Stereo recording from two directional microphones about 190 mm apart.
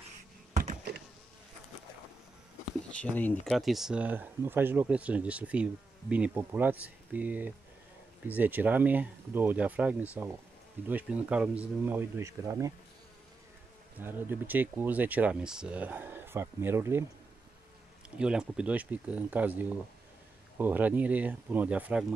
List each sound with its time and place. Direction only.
0.9 s insect: 55° right (ahead or behind)
2.9 s speech: 5° left (ahead or behind); by 12.7 s 15° right (ahead or behind)
13.9 s speech: 10° right (ahead or behind)
18.1 s speech: 5° right (ahead or behind)